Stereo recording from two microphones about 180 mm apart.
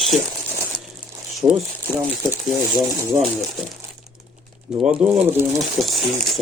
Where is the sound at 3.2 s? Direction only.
Centre (ahead or behind).